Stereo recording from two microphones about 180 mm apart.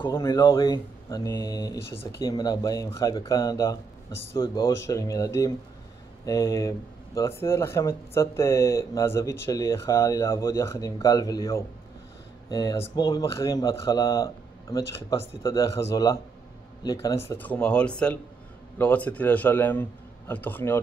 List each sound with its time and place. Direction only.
0.1 s speech: 15° left (ahead or behind)